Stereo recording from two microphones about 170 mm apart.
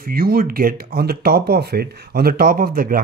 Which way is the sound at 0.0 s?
60° right (ahead or behind).